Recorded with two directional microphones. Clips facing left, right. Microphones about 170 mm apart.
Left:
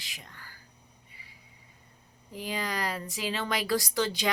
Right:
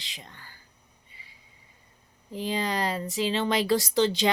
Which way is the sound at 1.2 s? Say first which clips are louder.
Right 1 dB; 25° right (ahead or behind).